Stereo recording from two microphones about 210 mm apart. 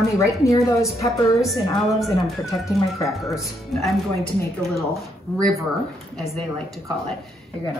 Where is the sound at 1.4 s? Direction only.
Centre (ahead or behind).